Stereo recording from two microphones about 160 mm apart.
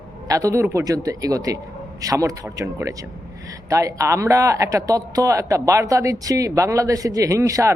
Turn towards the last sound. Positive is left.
turn(degrees=-20)  # may be behind; listen again after turning